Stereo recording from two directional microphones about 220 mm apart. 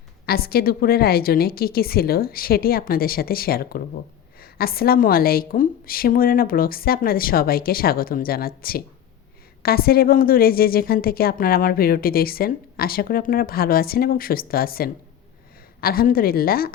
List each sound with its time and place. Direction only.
0.3 s a woman's voice: 45° left (ahead or behind)